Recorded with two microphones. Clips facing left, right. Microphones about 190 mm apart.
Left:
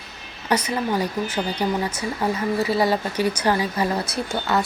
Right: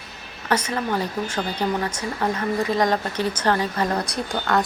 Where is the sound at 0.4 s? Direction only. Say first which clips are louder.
Left 1 dB; 10° left (ahead or behind).